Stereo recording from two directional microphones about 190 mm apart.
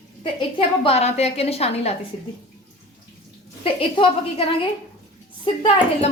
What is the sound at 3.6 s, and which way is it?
A woman's voice, 30° left (ahead or behind).